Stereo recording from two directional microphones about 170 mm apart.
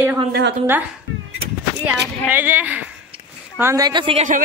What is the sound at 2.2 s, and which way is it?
A woman's voice, 10° right (ahead or behind).